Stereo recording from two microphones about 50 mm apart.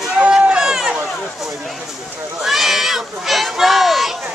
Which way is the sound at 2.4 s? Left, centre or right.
Centre.